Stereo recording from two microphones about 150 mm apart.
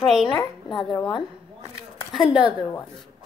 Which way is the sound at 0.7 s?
Centre (ahead or behind).